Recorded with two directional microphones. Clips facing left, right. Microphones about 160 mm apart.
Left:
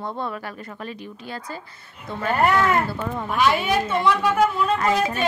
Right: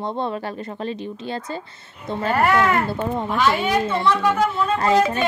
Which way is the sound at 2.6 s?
25° right (ahead or behind).